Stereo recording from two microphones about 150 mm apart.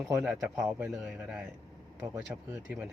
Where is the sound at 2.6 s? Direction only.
10° right (ahead or behind).